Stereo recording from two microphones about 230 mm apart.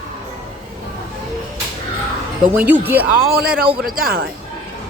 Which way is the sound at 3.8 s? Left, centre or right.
Right.